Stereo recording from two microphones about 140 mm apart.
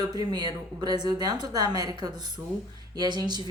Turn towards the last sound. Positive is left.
turn(degrees=-30)  # may be behind; listen again after turning